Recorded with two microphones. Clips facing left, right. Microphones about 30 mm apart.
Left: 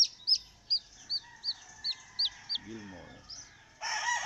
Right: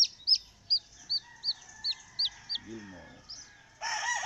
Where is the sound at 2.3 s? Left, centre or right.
Centre.